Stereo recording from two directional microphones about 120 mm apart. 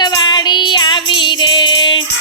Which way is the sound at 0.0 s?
35° left (ahead or behind).